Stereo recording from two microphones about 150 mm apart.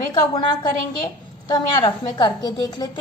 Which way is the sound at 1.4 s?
30° left (ahead or behind).